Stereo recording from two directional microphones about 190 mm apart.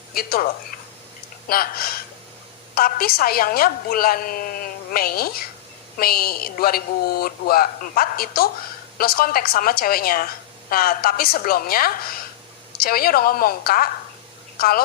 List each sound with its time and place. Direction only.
0.1 s a woman's voice: 50° left (ahead or behind)